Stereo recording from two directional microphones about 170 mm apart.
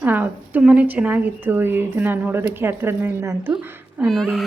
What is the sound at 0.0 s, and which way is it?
A woman's voice, 10° right (ahead or behind).